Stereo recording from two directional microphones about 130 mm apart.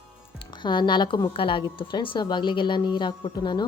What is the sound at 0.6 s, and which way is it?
A woman's voice, 35° left (ahead or behind).